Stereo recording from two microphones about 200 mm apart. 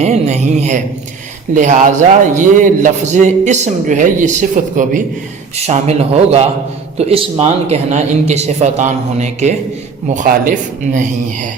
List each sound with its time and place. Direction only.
0.0 s a man's voice: 35° right (ahead or behind)